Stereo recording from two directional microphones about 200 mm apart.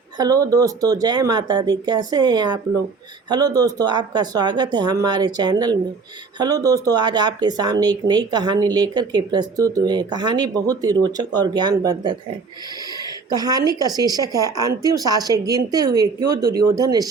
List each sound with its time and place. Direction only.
0.2 s speech: 15° right (ahead or behind)
13.3 s speech: 20° right (ahead or behind)